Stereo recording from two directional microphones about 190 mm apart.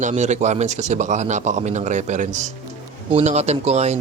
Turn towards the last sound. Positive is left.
turn(degrees=-35)  # may be behind; listen again after turning